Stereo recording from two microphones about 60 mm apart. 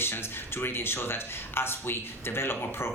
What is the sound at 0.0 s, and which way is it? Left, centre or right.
Speech, left.